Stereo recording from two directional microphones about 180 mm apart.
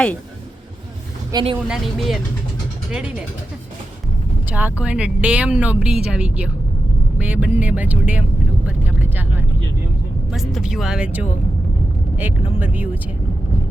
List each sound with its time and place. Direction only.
1.3 s speech: 25° right (ahead or behind)
1.6 s speech: centre (ahead or behind)
4.4 s speech: 10° right (ahead or behind)
12.5 s speech: 10° right (ahead or behind)